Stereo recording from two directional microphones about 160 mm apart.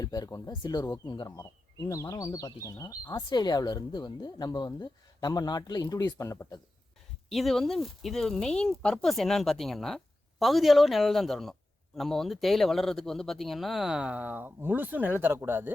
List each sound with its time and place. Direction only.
0.0 s speech: 25° left (ahead or behind)
7.3 s speech: centre (ahead or behind)